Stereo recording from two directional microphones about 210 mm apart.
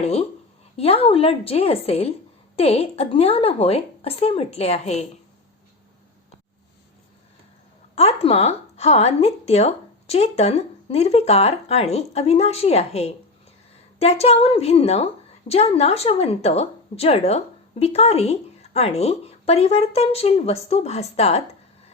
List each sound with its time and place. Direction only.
0.0 s a woman's voice: 30° left (ahead or behind)
7.9 s a woman's voice: 30° left (ahead or behind)